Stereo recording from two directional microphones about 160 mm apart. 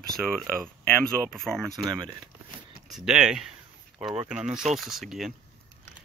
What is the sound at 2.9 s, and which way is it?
Speech, 5° right (ahead or behind).